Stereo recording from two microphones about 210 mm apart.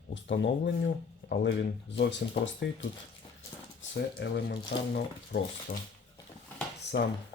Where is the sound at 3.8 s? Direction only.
55° left (ahead or behind).